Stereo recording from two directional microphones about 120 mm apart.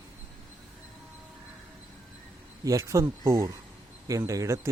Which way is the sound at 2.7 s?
25° right (ahead or behind).